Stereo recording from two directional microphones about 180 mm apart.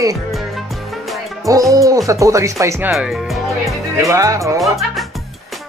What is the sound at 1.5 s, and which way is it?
Speech, 20° right (ahead or behind).